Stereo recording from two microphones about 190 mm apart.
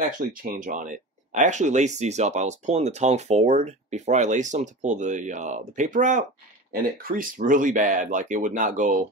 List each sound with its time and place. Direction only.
0.2 s speech: 45° right (ahead or behind)